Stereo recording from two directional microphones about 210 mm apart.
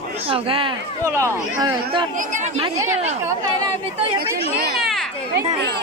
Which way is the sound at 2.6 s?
20° right (ahead or behind).